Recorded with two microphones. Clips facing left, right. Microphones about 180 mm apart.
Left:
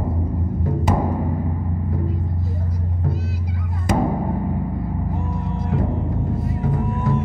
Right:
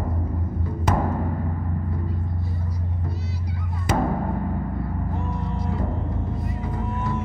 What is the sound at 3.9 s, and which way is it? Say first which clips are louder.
Music: left 3 dB; 15° left (ahead or behind).